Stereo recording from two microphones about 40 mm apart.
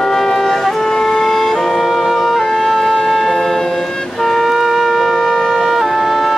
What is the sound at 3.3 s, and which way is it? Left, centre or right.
Siren, centre.